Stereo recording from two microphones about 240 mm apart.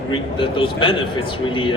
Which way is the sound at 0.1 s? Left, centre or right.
Left.